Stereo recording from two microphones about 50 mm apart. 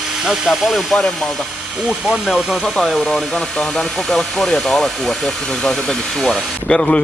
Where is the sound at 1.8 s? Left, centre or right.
Centre.